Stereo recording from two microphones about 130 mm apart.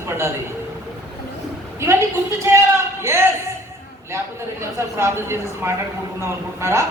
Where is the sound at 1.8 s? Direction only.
20° right (ahead or behind).